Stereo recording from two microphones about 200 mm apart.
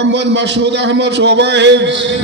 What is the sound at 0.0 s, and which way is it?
A man's voice, 60° right (ahead or behind).